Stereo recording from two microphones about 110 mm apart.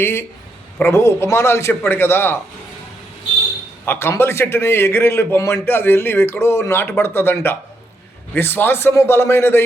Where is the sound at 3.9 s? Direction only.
20° left (ahead or behind).